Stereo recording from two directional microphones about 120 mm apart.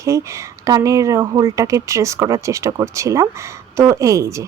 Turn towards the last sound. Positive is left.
turn(degrees=-25)  # may be behind; listen again after turning